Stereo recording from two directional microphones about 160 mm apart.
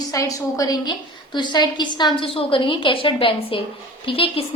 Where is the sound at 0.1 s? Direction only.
20° left (ahead or behind).